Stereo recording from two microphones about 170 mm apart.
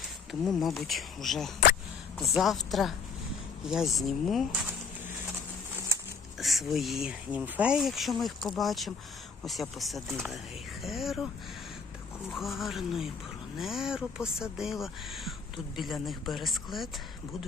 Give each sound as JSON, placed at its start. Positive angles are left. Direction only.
{"t": 0.3, "sound": "speech", "side_deg": 0}
{"t": 6.4, "sound": "speech", "side_deg": 0}
{"t": 12.3, "sound": "speech", "side_deg": 0}